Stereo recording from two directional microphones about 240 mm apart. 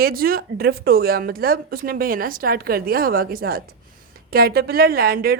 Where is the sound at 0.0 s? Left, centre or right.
Right.